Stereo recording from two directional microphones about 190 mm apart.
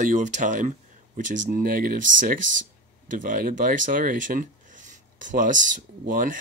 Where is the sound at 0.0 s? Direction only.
40° right (ahead or behind).